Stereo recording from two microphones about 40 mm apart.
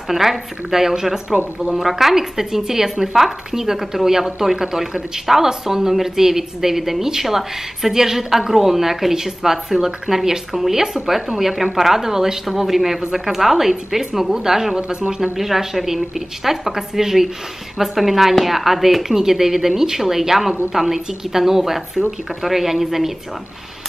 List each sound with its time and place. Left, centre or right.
0.1 s a woman's voice: centre
15.3 s a woman's voice: centre